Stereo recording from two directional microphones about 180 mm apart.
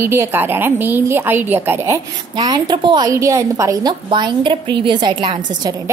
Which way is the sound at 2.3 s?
25° right (ahead or behind).